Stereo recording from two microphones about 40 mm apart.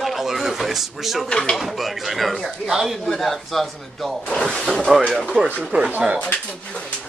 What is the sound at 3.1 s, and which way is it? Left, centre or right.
Speech, centre.